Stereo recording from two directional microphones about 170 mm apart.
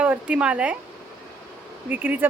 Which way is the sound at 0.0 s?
5° right (ahead or behind).